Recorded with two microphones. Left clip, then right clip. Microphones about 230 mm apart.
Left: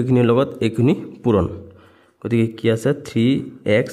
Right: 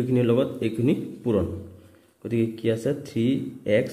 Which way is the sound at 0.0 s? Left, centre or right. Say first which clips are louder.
Left 6 dB; left.